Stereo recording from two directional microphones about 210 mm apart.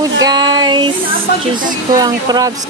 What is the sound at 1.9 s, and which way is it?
Speech, 20° right (ahead or behind).